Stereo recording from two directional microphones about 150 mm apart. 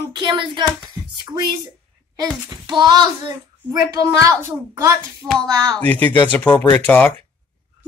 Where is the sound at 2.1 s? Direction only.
25° right (ahead or behind).